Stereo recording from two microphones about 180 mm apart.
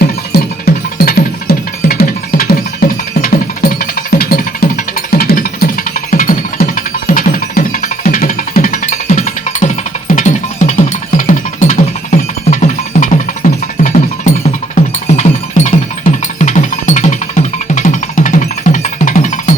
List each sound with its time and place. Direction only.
0.0 s music: 60° left (ahead or behind); by 19.5 s 45° left (ahead or behind)